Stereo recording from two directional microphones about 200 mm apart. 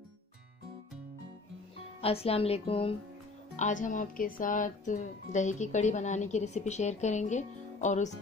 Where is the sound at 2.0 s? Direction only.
30° left (ahead or behind).